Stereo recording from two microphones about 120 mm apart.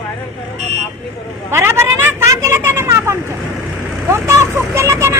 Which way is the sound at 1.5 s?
20° right (ahead or behind).